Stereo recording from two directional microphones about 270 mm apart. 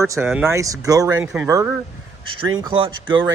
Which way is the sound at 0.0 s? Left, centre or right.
Centre.